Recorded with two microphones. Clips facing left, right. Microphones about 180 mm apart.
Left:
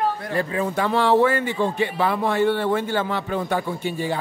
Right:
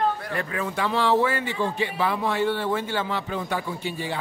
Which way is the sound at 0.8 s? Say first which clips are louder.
Left 4 dB; 55° left (ahead or behind).